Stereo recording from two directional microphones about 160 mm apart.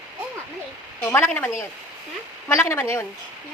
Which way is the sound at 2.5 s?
15° left (ahead or behind).